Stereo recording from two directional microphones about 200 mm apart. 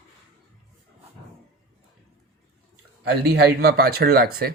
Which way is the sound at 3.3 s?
50° right (ahead or behind).